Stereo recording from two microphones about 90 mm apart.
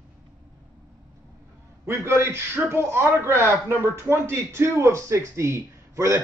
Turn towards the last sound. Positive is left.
turn(degrees=-35)  # may be behind; listen again after turning